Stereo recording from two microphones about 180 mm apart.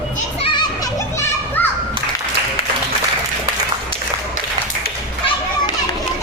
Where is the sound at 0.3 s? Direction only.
25° left (ahead or behind).